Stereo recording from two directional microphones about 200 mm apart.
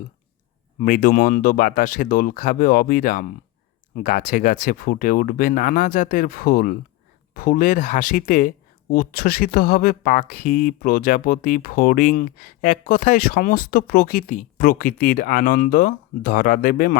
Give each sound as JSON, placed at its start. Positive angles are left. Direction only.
{"t": 0.8, "sound": "speech", "side_deg": 45}